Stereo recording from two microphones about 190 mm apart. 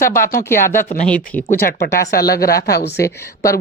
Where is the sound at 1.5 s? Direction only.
50° left (ahead or behind).